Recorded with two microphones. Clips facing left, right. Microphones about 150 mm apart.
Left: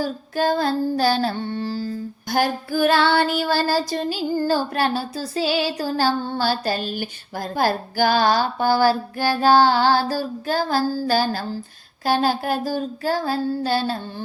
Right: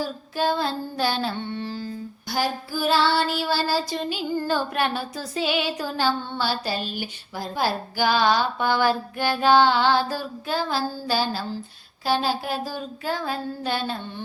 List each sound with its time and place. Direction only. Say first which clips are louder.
0.0 s child singing: left 3 dB; 45° left (ahead or behind)
2.3 s child singing: left 5 dB; 55° left (ahead or behind); by 14.0 s 35° left (ahead or behind)